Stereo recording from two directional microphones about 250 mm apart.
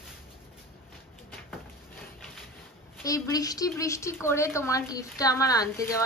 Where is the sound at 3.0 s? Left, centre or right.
Centre.